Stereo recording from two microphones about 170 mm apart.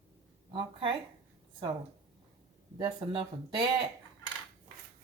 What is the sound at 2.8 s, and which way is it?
Speech, 25° right (ahead or behind).